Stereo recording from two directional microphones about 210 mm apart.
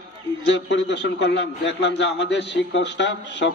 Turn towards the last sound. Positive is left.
turn(degrees=55)  # may be behind; listen again after turning